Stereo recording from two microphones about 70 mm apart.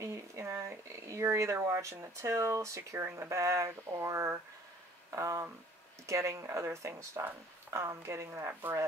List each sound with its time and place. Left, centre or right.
0.0 s speech: right